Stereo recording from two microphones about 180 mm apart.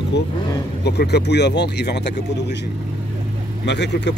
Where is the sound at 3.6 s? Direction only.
70° left (ahead or behind).